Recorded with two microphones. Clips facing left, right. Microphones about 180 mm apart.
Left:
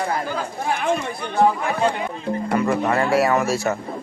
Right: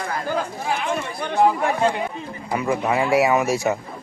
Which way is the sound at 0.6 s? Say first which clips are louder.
Left 6 dB; 55° left (ahead or behind).